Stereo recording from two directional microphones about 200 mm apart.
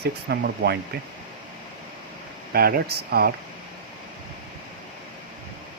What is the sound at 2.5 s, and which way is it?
Speech, 50° right (ahead or behind).